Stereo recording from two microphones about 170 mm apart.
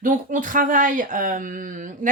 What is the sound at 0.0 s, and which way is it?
Speech, 50° right (ahead or behind).